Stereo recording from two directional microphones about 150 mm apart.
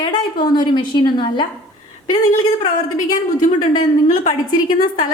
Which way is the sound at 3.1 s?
60° left (ahead or behind).